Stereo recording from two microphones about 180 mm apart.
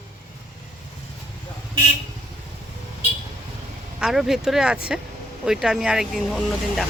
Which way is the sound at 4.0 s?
Centre (ahead or behind).